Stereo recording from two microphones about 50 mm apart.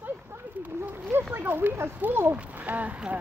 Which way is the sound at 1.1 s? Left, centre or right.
Right.